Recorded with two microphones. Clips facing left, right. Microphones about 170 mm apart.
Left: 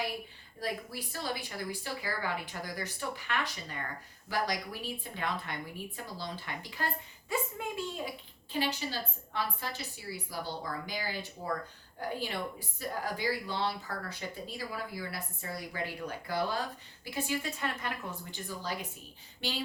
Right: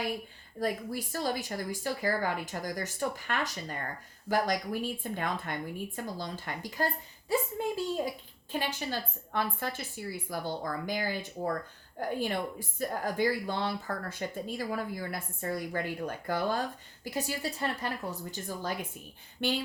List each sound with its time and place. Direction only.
0.6 s a woman's voice: 45° right (ahead or behind)
7.6 s a woman's voice: 30° right (ahead or behind)
8.5 s a woman's voice: 50° right (ahead or behind)